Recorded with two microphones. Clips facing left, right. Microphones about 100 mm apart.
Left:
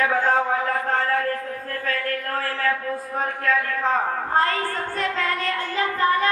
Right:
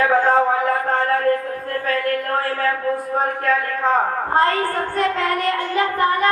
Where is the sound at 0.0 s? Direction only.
40° right (ahead or behind).